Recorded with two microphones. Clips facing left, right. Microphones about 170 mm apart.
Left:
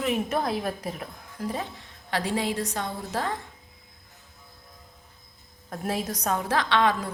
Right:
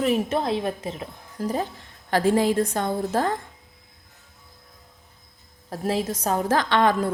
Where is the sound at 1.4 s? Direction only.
40° right (ahead or behind).